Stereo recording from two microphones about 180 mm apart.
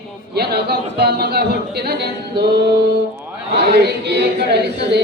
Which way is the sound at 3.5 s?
65° right (ahead or behind).